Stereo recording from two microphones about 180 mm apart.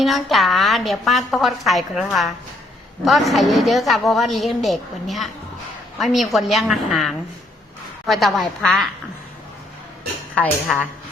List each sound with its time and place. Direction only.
0.0 s a woman's voice: centre (ahead or behind)
10.3 s a woman's voice: 10° left (ahead or behind)